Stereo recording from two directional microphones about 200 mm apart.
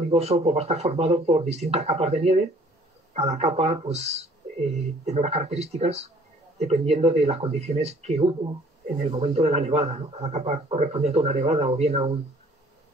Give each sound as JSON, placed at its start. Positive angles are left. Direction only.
{"t": 0.1, "sound": "speech", "side_deg": -30}